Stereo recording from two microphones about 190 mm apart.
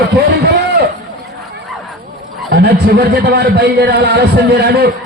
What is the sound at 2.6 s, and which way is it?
A man's voice, 55° right (ahead or behind).